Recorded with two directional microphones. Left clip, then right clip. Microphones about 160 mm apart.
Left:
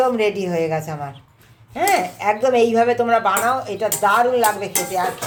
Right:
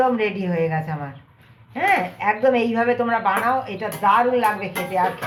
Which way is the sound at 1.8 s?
70° left (ahead or behind).